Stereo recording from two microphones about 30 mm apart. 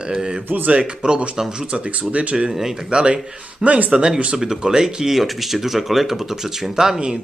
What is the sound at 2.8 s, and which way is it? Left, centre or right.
Speech, right.